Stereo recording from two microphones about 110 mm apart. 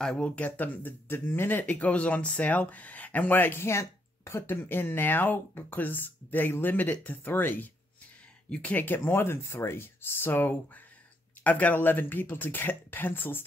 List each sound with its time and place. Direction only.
0.0 s speech: 10° left (ahead or behind)